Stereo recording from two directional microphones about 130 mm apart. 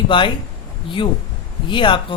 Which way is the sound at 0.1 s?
40° left (ahead or behind).